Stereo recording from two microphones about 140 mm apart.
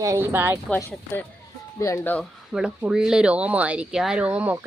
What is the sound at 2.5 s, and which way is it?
Speech, 5° right (ahead or behind).